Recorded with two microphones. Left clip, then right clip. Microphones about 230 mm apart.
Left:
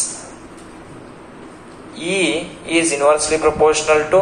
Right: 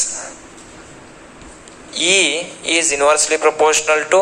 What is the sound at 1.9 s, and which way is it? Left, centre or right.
A man's voice, right.